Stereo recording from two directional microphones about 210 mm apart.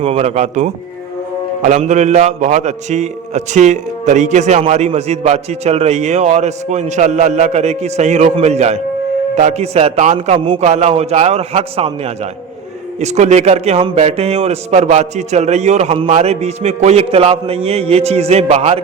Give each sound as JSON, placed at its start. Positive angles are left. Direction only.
{"t": 0.0, "sound": "a man's voice", "side_deg": -30}